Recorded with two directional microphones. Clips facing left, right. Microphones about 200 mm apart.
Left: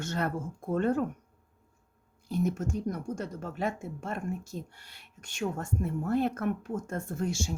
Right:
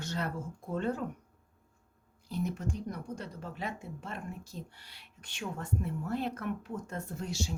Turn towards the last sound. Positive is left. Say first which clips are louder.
# left 5 dB
turn(degrees=50)  # may be behind; listen again after turning